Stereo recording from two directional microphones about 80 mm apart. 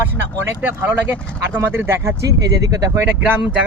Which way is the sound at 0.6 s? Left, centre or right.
Right.